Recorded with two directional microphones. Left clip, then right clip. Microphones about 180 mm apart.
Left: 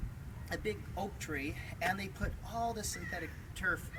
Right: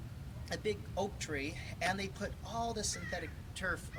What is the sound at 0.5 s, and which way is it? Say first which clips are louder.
Speech: right 2 dB; 15° right (ahead or behind).